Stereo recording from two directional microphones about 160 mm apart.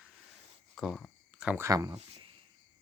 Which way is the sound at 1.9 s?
35° right (ahead or behind).